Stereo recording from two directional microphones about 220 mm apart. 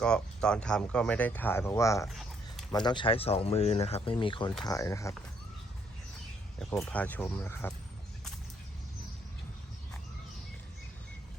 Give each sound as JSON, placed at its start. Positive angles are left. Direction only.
{"t": 0.0, "sound": "speech", "side_deg": 5}
{"t": 2.0, "sound": "a sound", "side_deg": 0}
{"t": 2.7, "sound": "speech", "side_deg": 20}
{"t": 6.6, "sound": "speech", "side_deg": 5}